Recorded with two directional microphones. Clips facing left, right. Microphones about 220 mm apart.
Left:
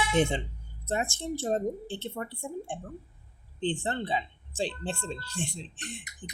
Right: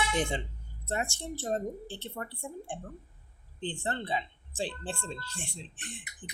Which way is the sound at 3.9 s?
15° left (ahead or behind).